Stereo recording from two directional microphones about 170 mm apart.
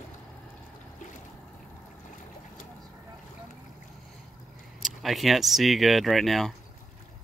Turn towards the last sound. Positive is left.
turn(degrees=0)  # may be behind; listen again after turning